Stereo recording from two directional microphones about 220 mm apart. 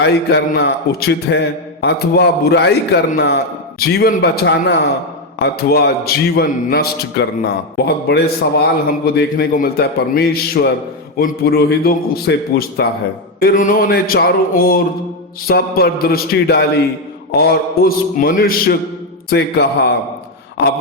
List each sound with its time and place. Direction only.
0.0 s a man's voice: 50° left (ahead or behind)
13.4 s a sound: 40° left (ahead or behind)
15.4 s a man's voice: 45° left (ahead or behind)